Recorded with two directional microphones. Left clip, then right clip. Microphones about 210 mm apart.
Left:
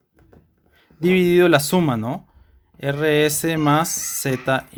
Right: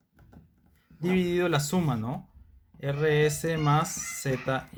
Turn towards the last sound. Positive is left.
turn(degrees=45)  # may be behind; listen again after turning